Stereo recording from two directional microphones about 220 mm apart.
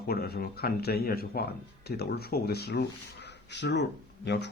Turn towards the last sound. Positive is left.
turn(degrees=50)  # may be behind; listen again after turning